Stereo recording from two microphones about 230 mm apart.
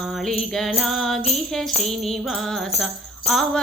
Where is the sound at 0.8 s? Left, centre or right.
Centre.